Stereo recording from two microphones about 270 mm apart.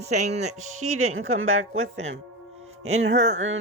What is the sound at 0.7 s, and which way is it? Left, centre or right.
A woman's voice, right.